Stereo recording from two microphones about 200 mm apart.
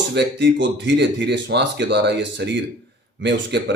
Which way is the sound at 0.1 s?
60° right (ahead or behind).